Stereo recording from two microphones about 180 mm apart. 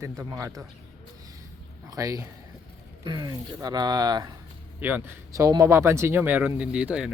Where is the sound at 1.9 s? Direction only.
20° right (ahead or behind).